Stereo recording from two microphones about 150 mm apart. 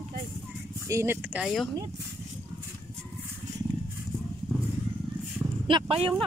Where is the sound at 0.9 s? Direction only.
20° right (ahead or behind).